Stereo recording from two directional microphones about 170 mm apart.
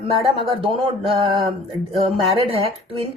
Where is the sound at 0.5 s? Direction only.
35° right (ahead or behind).